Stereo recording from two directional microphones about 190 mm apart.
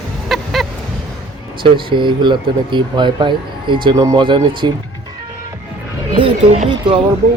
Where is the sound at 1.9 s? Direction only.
25° right (ahead or behind).